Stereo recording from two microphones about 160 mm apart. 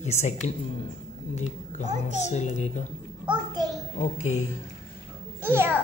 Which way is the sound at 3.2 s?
30° right (ahead or behind).